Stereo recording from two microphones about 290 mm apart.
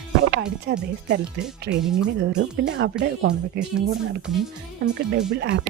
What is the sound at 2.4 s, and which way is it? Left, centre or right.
Speech, right.